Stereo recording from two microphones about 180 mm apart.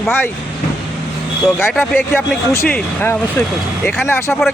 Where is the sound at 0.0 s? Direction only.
10° left (ahead or behind).